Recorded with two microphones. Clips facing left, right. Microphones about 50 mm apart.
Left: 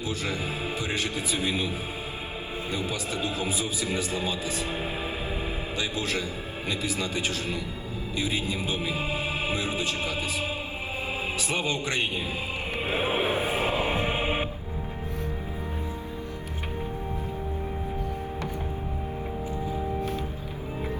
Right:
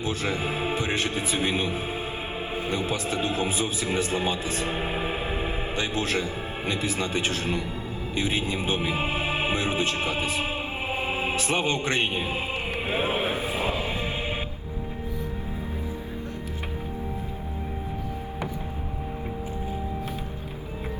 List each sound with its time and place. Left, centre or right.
0.0 s a man's voice: right
12.9 s a man's voice: centre
13.3 s music: left